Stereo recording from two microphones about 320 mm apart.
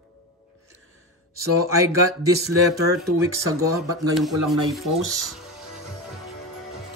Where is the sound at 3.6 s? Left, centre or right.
Centre.